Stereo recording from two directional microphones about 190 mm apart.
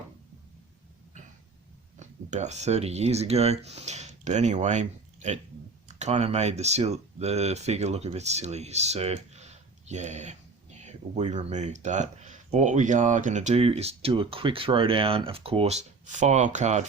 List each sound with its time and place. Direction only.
2.0 s speech: 40° right (ahead or behind)